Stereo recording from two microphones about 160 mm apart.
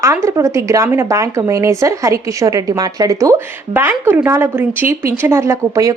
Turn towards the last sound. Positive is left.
turn(degrees=-20)  # may be behind; listen again after turning